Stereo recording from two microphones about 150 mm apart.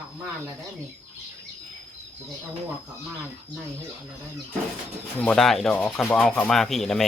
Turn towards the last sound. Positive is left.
turn(degrees=0)  # may be behind; listen again after turning